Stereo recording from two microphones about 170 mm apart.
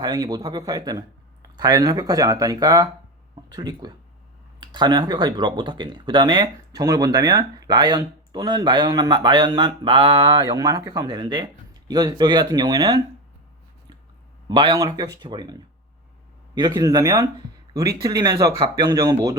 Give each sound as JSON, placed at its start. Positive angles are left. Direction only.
{"t": 0.0, "sound": "speech", "side_deg": -25}
{"t": 14.4, "sound": "speech", "side_deg": -25}
{"t": 16.6, "sound": "speech", "side_deg": -25}